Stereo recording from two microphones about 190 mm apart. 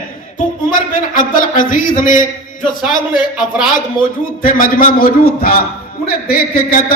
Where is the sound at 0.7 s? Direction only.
45° left (ahead or behind).